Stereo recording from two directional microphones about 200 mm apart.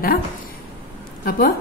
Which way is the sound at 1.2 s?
50° left (ahead or behind).